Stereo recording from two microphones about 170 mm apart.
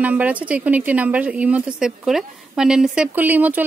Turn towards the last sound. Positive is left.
turn(degrees=-10)  # may be behind; listen again after turning